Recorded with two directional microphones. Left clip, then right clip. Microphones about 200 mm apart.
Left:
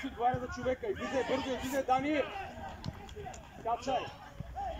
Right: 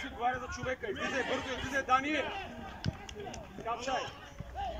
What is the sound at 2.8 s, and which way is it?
Basketball bounce, 20° left (ahead or behind).